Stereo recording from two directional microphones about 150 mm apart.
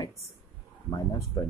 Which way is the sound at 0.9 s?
25° left (ahead or behind).